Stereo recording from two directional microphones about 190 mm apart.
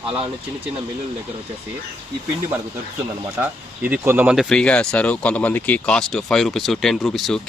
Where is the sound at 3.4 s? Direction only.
10° right (ahead or behind).